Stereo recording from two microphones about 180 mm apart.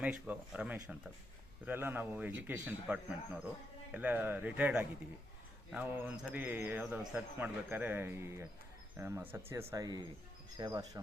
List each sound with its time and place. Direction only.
0.0 s speech: 5° right (ahead or behind)